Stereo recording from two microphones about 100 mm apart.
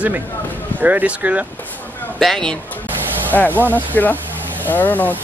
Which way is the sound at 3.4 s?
20° right (ahead or behind).